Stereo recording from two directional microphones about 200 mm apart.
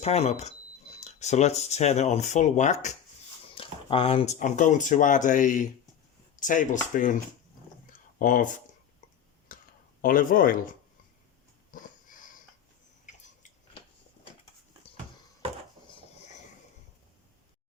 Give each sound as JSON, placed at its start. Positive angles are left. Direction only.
{"t": 0.0, "sound": "speech", "side_deg": 30}
{"t": 3.5, "sound": "a sound", "side_deg": 25}
{"t": 4.4, "sound": "speech", "side_deg": 40}
{"t": 8.2, "sound": "speech", "side_deg": 40}
{"t": 9.5, "sound": "a sound", "side_deg": 45}
{"t": 10.0, "sound": "speech", "side_deg": 45}
{"t": 11.7, "sound": "wheeze", "side_deg": 40}